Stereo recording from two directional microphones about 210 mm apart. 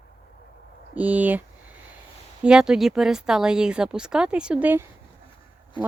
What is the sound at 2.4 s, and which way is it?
Speech, 5° right (ahead or behind).